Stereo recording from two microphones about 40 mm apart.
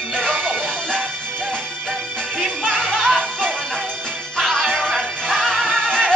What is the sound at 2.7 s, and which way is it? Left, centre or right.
Music, centre.